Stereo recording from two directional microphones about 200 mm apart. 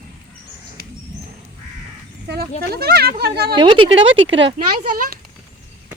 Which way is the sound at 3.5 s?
25° right (ahead or behind).